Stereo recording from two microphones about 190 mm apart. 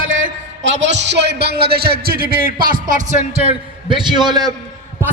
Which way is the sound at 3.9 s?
25° right (ahead or behind).